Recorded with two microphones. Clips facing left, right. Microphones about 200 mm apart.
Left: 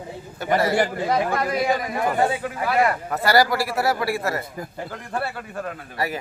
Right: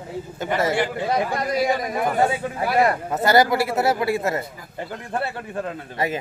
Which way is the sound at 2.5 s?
30° right (ahead or behind).